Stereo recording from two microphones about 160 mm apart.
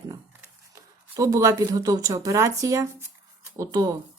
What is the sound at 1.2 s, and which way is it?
Speech, 20° right (ahead or behind).